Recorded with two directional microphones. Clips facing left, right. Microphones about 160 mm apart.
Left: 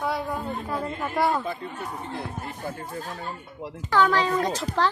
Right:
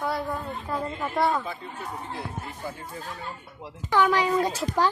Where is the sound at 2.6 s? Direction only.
50° left (ahead or behind).